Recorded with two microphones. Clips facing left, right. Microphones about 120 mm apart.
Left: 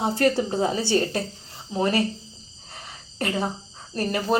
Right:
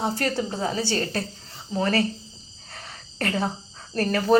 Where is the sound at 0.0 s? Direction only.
25° left (ahead or behind).